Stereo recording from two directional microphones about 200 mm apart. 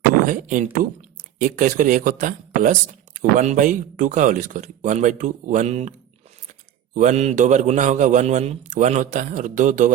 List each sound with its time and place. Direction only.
0.3 s a man's voice: 40° right (ahead or behind)
6.9 s a man's voice: 35° right (ahead or behind)